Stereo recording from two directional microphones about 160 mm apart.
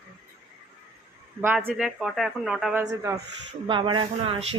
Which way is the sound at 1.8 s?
Centre (ahead or behind).